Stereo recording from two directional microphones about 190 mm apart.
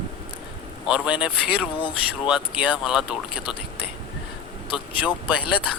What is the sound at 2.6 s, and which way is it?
Speech, 5° right (ahead or behind).